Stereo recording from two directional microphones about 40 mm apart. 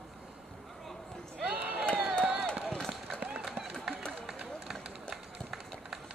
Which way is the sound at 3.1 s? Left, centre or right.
Right.